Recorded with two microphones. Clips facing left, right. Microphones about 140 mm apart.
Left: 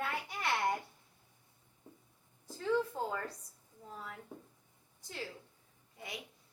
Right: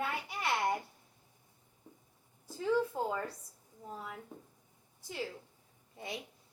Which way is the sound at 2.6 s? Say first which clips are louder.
Right 2 dB; 10° right (ahead or behind).